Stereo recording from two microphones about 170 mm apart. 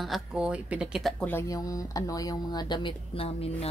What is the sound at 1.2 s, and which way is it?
A child's voice, 15° left (ahead or behind).